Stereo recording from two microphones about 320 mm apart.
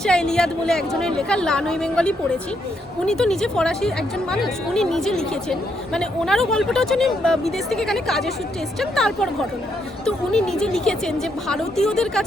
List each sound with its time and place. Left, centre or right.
0.0 s speech: centre